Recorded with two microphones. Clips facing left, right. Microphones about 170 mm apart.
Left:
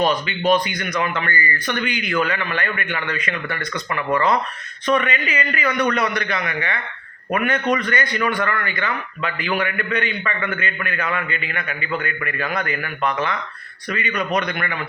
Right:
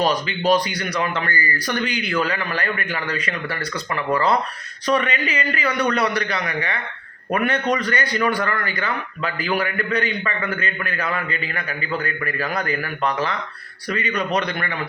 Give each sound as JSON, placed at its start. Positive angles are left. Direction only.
{"t": 0.0, "sound": "a man's voice", "side_deg": -35}